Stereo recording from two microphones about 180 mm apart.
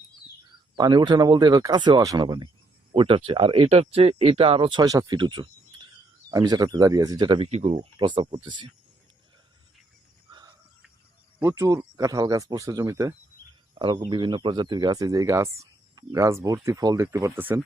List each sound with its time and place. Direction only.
0.8 s speech: 25° right (ahead or behind)
11.3 s speech: 15° right (ahead or behind)